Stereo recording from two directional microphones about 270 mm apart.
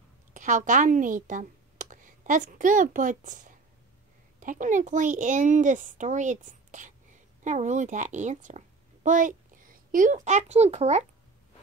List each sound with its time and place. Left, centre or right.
0.3 s a child's voice: right